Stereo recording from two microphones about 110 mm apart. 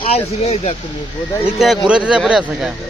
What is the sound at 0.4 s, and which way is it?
Speech, 70° left (ahead or behind).